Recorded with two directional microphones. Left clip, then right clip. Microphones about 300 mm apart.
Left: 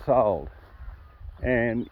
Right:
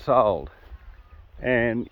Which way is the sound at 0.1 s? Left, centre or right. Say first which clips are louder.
Right 2 dB; centre.